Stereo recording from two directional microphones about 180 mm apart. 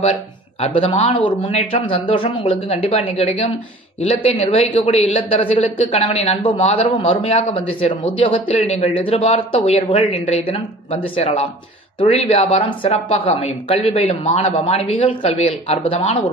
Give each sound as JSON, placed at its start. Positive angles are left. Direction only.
{"t": 0.0, "sound": "a woman's voice", "side_deg": 35}